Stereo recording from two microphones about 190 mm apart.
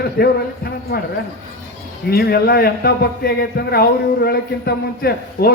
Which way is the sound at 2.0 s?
55° left (ahead or behind).